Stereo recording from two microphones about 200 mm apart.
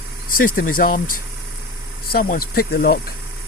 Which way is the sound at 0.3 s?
45° left (ahead or behind).